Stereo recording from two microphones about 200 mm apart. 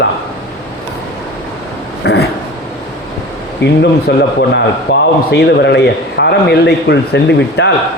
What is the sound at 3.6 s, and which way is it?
Speech, 60° left (ahead or behind).